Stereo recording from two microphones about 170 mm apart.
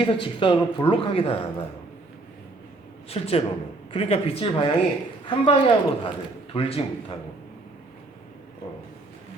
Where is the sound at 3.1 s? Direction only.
35° left (ahead or behind).